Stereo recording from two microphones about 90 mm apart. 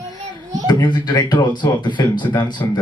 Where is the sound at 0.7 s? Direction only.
55° left (ahead or behind).